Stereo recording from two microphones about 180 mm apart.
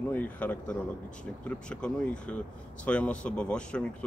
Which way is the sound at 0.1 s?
10° left (ahead or behind).